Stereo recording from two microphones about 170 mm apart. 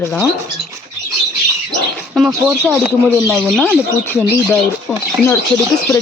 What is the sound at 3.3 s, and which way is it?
Speech, centre (ahead or behind).